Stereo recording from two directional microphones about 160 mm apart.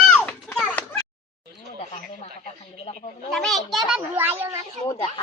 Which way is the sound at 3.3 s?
5° left (ahead or behind).